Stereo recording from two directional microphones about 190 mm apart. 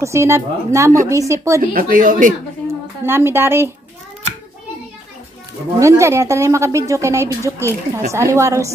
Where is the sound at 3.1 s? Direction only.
10° right (ahead or behind).